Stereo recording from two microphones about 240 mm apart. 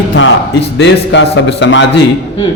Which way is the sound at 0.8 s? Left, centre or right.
Left.